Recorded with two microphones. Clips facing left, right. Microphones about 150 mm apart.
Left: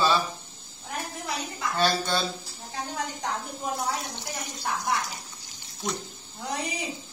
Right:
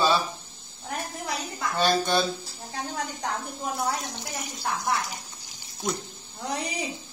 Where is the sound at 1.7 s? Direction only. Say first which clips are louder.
Right 3 dB; 15° right (ahead or behind).